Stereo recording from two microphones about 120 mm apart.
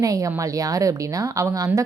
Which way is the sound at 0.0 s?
30° right (ahead or behind).